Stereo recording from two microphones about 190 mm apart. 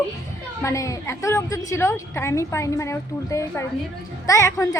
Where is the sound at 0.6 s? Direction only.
15° left (ahead or behind).